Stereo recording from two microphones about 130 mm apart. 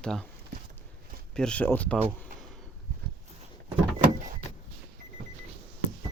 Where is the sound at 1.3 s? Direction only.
5° left (ahead or behind).